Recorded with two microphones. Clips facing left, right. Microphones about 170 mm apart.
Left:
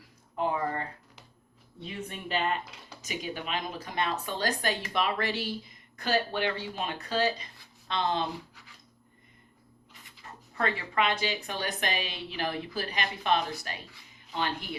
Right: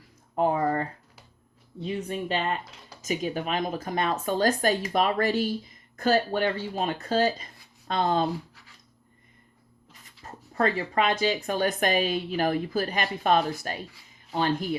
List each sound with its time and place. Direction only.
0.3 s a sound: 40° right (ahead or behind)
1.8 s a woman's voice: 35° right (ahead or behind)
9.9 s a woman's voice: 45° right (ahead or behind)